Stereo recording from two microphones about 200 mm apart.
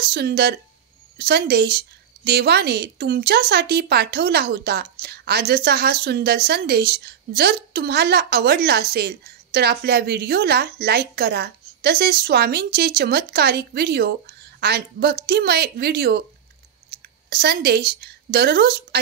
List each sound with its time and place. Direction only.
0.0 s a woman's voice: 55° right (ahead or behind)
16.9 s a sound: 50° right (ahead or behind)
17.3 s a woman's voice: 55° right (ahead or behind)